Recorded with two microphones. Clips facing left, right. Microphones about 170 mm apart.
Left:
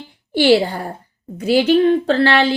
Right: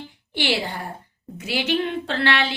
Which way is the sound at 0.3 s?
40° left (ahead or behind).